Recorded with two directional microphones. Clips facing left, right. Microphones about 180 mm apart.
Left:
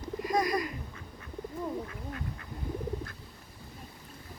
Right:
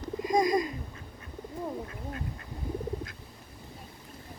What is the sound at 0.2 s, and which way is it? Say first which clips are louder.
Bird: right 4 dB; 20° right (ahead or behind).